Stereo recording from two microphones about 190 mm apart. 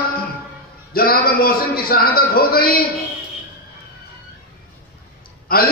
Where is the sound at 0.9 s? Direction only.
50° left (ahead or behind).